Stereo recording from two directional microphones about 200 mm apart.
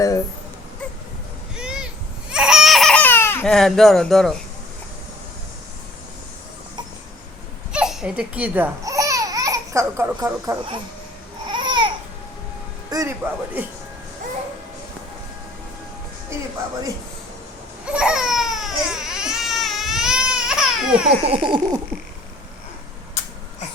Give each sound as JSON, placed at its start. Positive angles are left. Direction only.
{"t": 1.5, "sound": "a sound", "side_deg": -5}
{"t": 2.3, "sound": "crying", "side_deg": -5}
{"t": 7.7, "sound": "babbling", "side_deg": -5}
{"t": 12.9, "sound": "speech", "side_deg": -15}
{"t": 17.8, "sound": "baby cry", "side_deg": -5}
{"t": 21.3, "sound": "a sound", "side_deg": -25}